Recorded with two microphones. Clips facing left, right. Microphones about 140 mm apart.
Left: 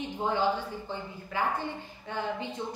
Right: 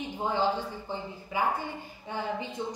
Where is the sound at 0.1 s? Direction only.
10° right (ahead or behind).